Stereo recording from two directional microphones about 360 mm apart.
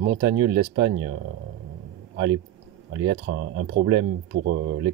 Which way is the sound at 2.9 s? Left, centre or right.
Right.